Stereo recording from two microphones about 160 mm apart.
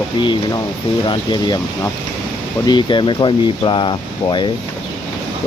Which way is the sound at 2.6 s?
30° left (ahead or behind).